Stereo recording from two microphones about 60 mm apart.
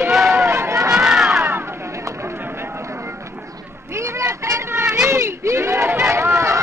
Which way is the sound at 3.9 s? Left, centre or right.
Right.